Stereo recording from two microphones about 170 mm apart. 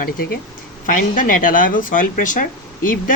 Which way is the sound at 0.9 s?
55° left (ahead or behind).